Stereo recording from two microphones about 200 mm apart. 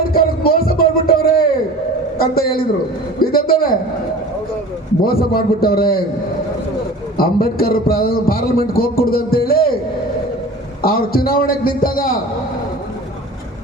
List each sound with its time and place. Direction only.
0.1 s a sound: 50° left (ahead or behind)
2.1 s a man's voice: 50° left (ahead or behind)
5.0 s a man's voice: 50° left (ahead or behind)
7.2 s a man's voice: 50° left (ahead or behind)
10.8 s a man's voice: 50° left (ahead or behind)